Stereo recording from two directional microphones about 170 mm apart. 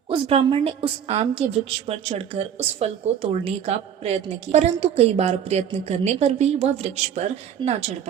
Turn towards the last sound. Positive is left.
turn(degrees=-40)  # may be behind; listen again after turning